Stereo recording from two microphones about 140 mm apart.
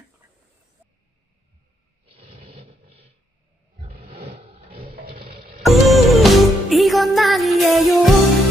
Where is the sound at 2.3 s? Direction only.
40° right (ahead or behind).